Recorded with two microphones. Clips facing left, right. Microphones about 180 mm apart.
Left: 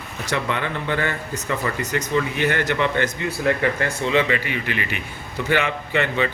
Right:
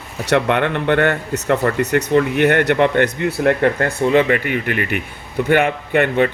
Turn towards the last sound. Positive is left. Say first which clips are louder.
# right 6 dB
turn(degrees=-55)  # may be behind; listen again after turning